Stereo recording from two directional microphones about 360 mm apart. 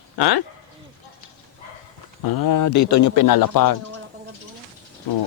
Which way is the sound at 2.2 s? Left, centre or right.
Left.